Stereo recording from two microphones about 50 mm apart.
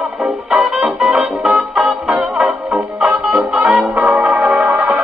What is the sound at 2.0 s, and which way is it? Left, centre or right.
Music, right.